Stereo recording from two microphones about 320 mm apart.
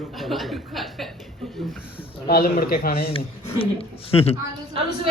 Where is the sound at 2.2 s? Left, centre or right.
Left.